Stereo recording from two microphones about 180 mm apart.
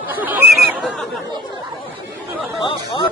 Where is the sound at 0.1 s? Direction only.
10° right (ahead or behind).